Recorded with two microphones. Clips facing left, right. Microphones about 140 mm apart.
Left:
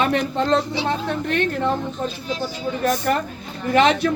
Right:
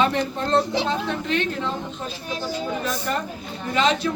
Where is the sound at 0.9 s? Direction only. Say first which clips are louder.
Left 1 dB; 55° left (ahead or behind).